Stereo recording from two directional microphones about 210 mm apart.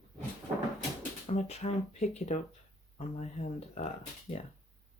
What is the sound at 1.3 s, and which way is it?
Speech, 30° left (ahead or behind).